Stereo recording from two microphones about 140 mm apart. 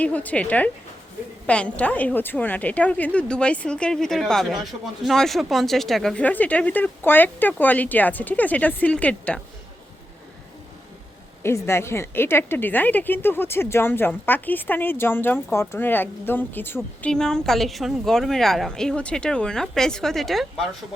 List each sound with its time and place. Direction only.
0.0 s a woman's voice: 10° left (ahead or behind)
11.4 s a woman's voice: 20° left (ahead or behind); by 20.7 s centre (ahead or behind)